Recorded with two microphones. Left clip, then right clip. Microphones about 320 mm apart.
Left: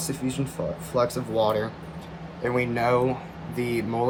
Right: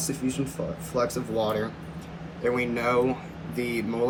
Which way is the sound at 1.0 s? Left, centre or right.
Left.